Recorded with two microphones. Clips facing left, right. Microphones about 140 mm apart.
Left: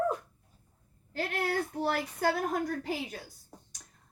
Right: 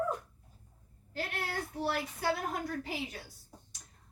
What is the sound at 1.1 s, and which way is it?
Speech, 50° left (ahead or behind).